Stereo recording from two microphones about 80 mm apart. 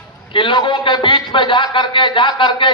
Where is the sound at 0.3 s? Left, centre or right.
Left.